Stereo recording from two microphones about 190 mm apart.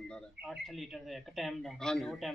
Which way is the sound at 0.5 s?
Centre (ahead or behind).